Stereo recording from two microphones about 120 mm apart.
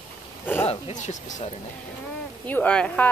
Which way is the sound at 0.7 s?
70° left (ahead or behind).